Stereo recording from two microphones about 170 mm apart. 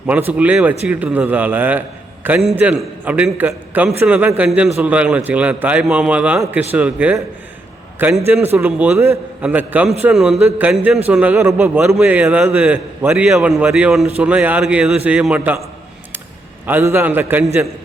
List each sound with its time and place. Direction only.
0.1 s a man's voice: 10° right (ahead or behind)
8.3 s a man's voice: 10° right (ahead or behind)
16.6 s a man's voice: 10° right (ahead or behind)